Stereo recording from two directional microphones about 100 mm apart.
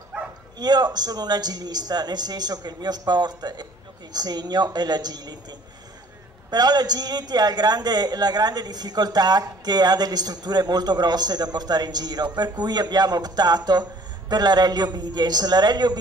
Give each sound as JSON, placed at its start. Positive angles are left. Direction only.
{"t": 0.6, "sound": "a man's voice", "side_deg": -40}